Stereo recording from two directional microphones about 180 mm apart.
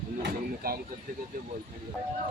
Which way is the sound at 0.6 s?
55° right (ahead or behind).